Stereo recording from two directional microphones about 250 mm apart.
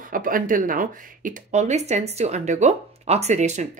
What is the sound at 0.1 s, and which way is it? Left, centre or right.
Speech, right.